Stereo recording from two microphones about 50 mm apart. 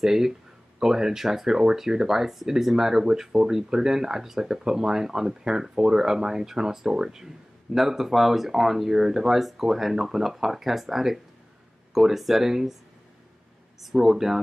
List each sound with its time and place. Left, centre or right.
0.0 s speech: centre
13.7 s speech: centre